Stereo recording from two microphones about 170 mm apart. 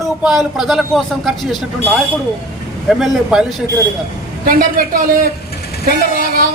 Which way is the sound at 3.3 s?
5° right (ahead or behind).